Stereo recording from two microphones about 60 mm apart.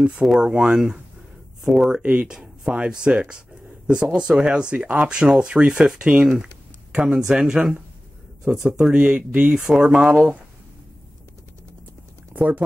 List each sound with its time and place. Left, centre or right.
0.4 s speech: centre
2.0 s speech: centre
6.3 s speech: centre
12.4 s speech: right